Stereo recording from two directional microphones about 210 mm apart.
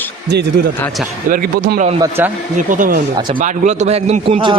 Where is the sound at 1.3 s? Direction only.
40° right (ahead or behind).